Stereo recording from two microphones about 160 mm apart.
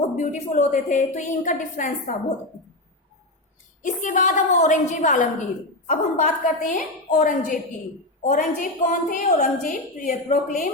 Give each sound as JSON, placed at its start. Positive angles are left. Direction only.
{"t": 0.2, "sound": "a woman's voice", "side_deg": 50}
{"t": 3.8, "sound": "a woman's voice", "side_deg": 50}